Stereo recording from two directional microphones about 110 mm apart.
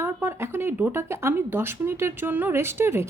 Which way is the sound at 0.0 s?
20° right (ahead or behind).